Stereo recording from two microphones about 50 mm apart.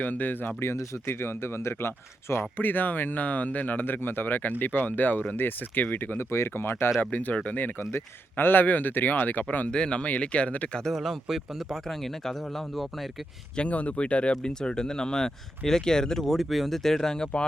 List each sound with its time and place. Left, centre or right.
0.0 s speech: left
0.6 s speech: left
2.6 s speech: left
6.3 s speech: left
7.0 s speech: left
7.8 s speech: left
9.7 s speech: centre
10.9 s speech: centre
13.6 s speech: left